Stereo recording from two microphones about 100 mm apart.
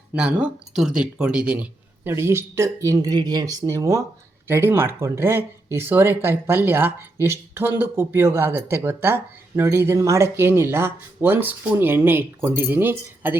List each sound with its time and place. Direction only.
0.2 s speech: 10° right (ahead or behind)